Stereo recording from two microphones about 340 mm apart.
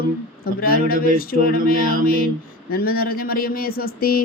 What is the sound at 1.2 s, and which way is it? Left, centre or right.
Speech, left.